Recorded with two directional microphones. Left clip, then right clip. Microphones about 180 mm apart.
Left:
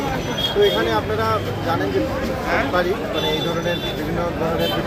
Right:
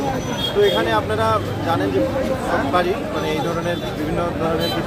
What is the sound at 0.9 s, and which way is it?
Speech, 10° right (ahead or behind).